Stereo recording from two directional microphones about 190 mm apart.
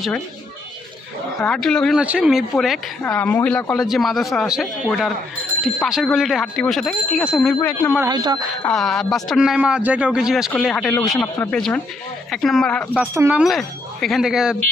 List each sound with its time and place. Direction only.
1.4 s speech: 5° left (ahead or behind)
8.0 s speech: 25° right (ahead or behind)
8.6 s speech: 5° left (ahead or behind)
13.0 s speech: 10° right (ahead or behind)
13.4 s speech: centre (ahead or behind)